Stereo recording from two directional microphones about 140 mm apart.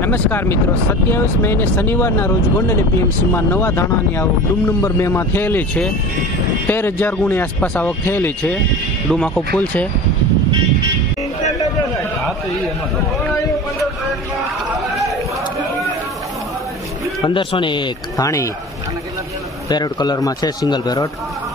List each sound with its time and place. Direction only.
0.0 s speech: 15° left (ahead or behind)
17.2 s speech: 35° left (ahead or behind)
18.2 s a man's voice: 20° left (ahead or behind)
19.7 s a man's voice: 30° left (ahead or behind)